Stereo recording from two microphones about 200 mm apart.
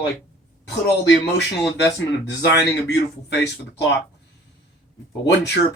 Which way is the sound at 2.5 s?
60° left (ahead or behind).